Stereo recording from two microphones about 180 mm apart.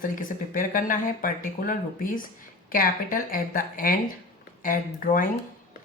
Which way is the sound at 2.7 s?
50° left (ahead or behind).